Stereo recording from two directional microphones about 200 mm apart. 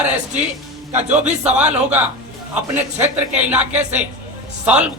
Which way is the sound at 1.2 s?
35° right (ahead or behind).